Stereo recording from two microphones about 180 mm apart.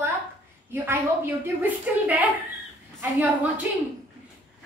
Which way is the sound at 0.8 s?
10° right (ahead or behind).